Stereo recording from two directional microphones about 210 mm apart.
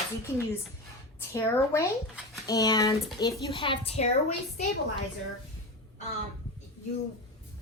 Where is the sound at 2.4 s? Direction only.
20° left (ahead or behind).